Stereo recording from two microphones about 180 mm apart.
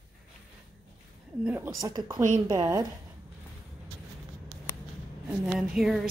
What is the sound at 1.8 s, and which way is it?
A woman's voice, 20° right (ahead or behind).